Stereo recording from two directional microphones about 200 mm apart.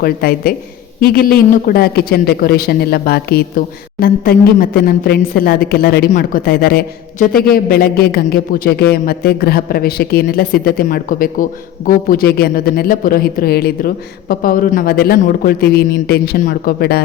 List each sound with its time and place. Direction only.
0.0 s a man's voice: 50° left (ahead or behind)